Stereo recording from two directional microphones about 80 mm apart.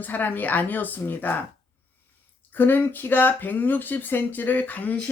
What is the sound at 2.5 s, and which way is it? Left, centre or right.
Speech, left.